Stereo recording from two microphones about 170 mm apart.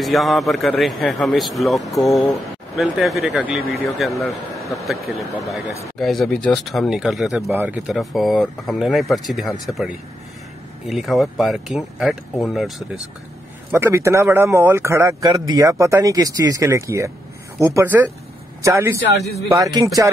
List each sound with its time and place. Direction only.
0.0 s speech: centre (ahead or behind)
10.9 s speech: centre (ahead or behind)
13.7 s speech: 15° right (ahead or behind)